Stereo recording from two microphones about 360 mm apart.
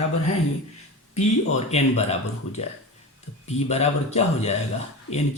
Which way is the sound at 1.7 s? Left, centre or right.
Centre.